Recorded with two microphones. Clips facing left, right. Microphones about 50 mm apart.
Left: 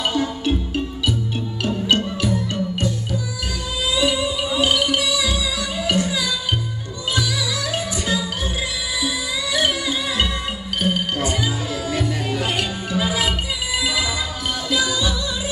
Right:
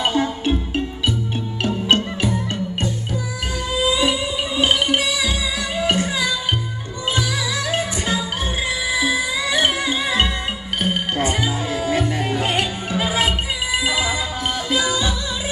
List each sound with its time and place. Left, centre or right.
0.0 s music: right
1.6 s music: right
3.9 s music: right